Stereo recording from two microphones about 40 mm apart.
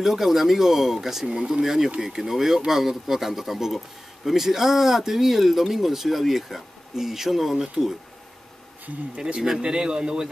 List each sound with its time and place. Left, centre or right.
0.0 s speech: centre
9.1 s a man's voice: centre